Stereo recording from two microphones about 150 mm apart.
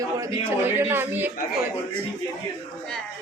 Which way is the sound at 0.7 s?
15° right (ahead or behind).